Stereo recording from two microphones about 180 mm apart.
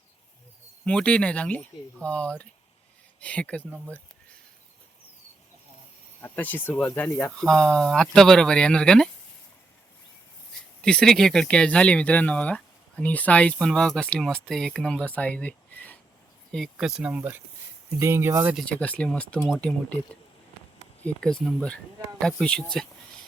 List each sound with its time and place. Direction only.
0.9 s speech: 5° left (ahead or behind)
6.2 s speech: 10° left (ahead or behind)
10.8 s speech: 5° left (ahead or behind); by 18.5 s 15° right (ahead or behind)
18.5 s speech: 5° left (ahead or behind)
21.0 s speech: 5° left (ahead or behind)